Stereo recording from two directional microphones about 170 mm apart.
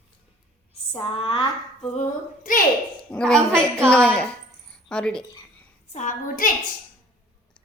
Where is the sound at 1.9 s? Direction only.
50° left (ahead or behind).